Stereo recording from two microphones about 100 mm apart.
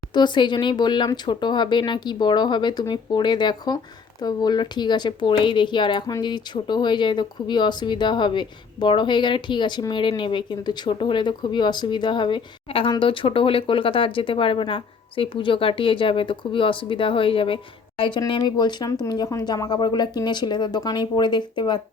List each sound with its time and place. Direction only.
0.1 s speech: 50° left (ahead or behind)
18.3 s speech: 50° left (ahead or behind)